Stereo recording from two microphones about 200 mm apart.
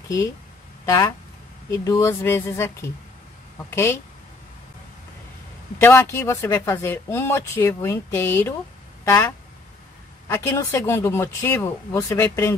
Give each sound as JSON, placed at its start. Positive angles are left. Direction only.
{"t": 0.8, "sound": "speech", "side_deg": 15}
{"t": 5.8, "sound": "speech", "side_deg": 10}